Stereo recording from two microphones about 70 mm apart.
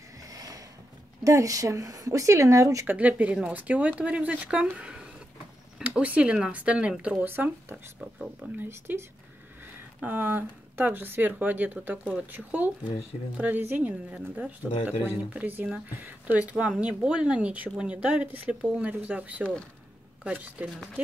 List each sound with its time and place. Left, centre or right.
0.2 s a sound: right
1.2 s a woman's voice: right
2.9 s speech: right
7.2 s speech: right
10.0 s speech: right